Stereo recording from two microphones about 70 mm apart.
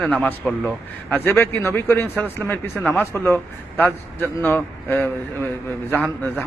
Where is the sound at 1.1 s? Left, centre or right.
Left.